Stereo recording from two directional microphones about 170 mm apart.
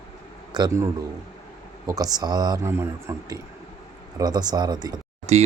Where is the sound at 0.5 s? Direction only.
20° right (ahead or behind).